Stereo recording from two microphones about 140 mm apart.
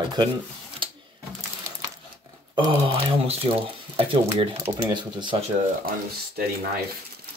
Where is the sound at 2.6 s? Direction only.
35° right (ahead or behind).